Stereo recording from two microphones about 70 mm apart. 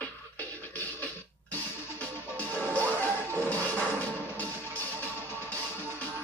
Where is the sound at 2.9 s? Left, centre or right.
Right.